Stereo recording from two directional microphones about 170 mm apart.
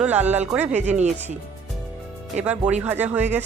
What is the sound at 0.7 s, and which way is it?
Speech, 40° right (ahead or behind).